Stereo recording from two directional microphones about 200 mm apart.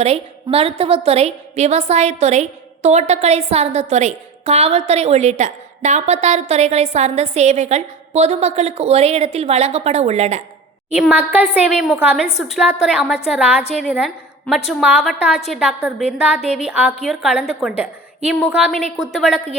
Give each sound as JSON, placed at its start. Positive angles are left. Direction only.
{"t": 0.0, "sound": "a woman's voice", "side_deg": -30}
{"t": 10.9, "sound": "a woman's voice", "side_deg": -5}